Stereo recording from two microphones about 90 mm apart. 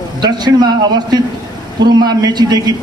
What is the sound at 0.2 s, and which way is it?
A man's voice, 50° right (ahead or behind).